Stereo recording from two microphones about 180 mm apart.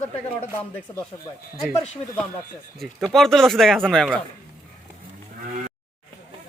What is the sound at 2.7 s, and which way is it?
Speech, centre (ahead or behind).